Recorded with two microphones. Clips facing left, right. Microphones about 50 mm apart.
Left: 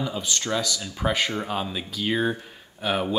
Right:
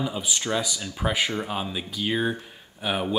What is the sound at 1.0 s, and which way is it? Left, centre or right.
Speech, centre.